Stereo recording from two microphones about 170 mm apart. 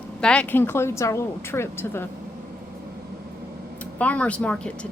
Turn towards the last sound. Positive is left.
turn(degrees=5)  # may be behind; listen again after turning